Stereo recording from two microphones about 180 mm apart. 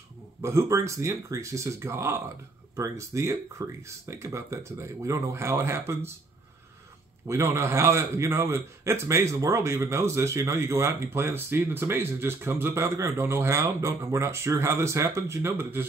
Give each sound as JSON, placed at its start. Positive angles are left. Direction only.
{"t": 0.4, "sound": "a man's voice", "side_deg": -15}
{"t": 7.2, "sound": "a man's voice", "side_deg": -15}